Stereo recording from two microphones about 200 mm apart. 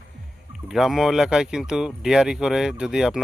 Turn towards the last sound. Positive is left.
turn(degrees=0)  # may be behind; listen again after turning